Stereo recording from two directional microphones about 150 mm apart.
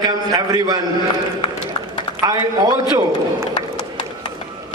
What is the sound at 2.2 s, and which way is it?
Speech, 25° right (ahead or behind).